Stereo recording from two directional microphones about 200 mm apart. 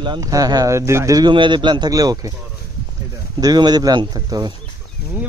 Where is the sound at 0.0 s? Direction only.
20° right (ahead or behind).